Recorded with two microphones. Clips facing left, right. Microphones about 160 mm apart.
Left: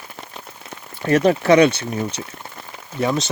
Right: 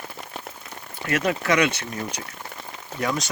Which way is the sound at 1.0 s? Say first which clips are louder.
Left 8 dB; 35° left (ahead or behind).